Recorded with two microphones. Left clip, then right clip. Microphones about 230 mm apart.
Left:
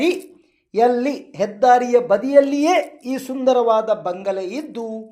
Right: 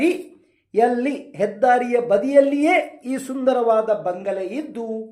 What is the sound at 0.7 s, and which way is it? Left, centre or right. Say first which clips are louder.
Speech: left 2 dB; left.